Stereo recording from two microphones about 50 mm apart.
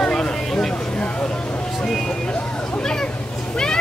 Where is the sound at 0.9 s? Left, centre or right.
Left.